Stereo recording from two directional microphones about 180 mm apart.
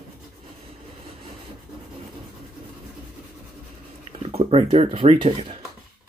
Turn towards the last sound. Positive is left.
turn(degrees=-30)  # may be behind; listen again after turning